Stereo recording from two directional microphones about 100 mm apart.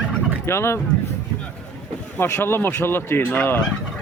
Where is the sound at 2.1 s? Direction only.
25° left (ahead or behind).